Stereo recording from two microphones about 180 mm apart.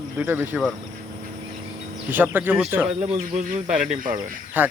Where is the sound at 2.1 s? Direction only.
10° right (ahead or behind).